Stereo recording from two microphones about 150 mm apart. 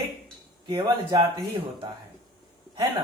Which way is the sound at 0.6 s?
30° right (ahead or behind).